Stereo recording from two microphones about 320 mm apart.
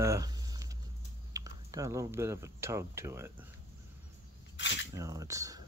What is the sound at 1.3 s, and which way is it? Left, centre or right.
Speech, centre.